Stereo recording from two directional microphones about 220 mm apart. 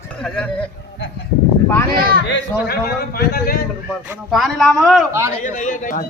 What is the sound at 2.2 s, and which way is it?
A man's voice, 50° left (ahead or behind).